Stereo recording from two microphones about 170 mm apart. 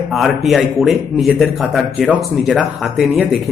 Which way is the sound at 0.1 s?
Centre (ahead or behind).